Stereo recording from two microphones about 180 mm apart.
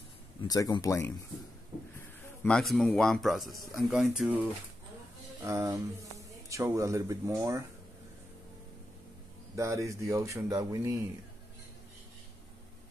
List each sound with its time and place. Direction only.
0.4 s speech: 20° left (ahead or behind)
2.0 s a man's voice: 5° left (ahead or behind)
5.4 s speech: 15° right (ahead or behind)
9.6 s speech: 15° right (ahead or behind)